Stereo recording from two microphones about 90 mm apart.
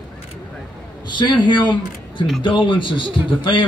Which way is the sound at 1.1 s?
60° left (ahead or behind).